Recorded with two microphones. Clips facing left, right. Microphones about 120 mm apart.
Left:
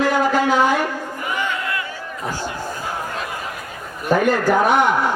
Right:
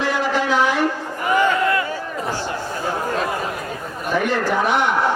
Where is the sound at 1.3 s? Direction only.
45° right (ahead or behind).